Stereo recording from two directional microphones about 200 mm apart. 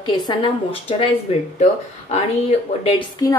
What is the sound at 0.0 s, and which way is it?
Speech, 25° left (ahead or behind).